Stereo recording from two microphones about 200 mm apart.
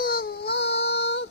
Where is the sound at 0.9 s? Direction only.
55° left (ahead or behind).